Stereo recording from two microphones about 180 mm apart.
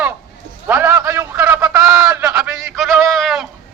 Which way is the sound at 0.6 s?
15° right (ahead or behind).